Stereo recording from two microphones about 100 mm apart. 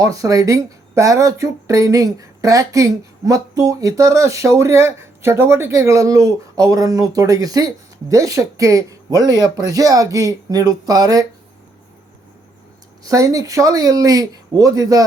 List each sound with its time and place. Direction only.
0.0 s speech: 35° right (ahead or behind)
13.0 s speech: 35° right (ahead or behind)